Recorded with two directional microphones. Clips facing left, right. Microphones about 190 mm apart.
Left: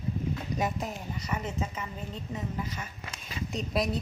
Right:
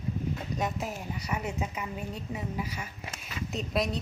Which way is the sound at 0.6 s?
5° right (ahead or behind).